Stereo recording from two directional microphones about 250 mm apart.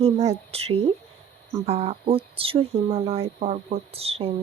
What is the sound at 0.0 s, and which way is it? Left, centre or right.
Speech, right.